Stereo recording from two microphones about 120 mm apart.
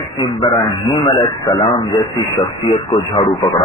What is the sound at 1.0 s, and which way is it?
Speech, 35° left (ahead or behind).